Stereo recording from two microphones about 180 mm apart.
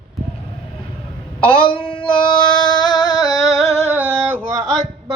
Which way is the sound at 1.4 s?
30° left (ahead or behind).